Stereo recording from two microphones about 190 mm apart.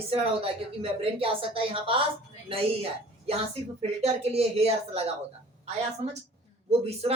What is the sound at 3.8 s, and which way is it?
Speech, 35° right (ahead or behind).